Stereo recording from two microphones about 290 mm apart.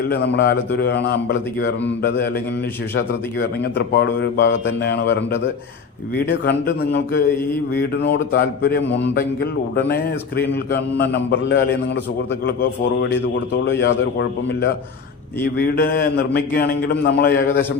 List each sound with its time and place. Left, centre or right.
0.1 s speech: left
13.7 s speech: left
15.5 s speech: left